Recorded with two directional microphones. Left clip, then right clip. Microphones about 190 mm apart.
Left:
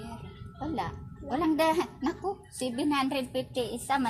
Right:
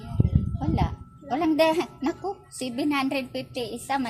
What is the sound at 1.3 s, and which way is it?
Speech, 35° right (ahead or behind).